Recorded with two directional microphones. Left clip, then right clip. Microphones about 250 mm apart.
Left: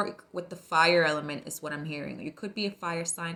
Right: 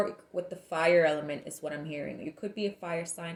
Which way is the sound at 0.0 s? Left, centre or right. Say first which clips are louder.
Right 1 dB; left.